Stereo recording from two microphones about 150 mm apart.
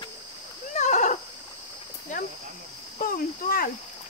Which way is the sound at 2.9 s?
70° left (ahead or behind).